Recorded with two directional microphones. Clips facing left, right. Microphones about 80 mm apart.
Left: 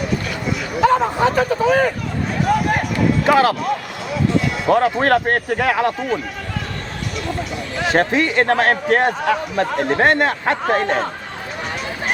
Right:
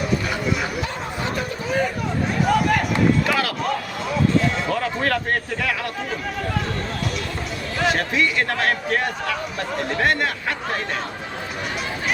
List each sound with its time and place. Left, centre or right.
0.8 s a sound: left
3.2 s speech: left
4.7 s speech: left
7.9 s speech: left